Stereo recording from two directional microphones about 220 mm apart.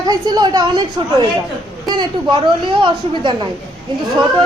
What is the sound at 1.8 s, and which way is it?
A woman's voice, 20° right (ahead or behind).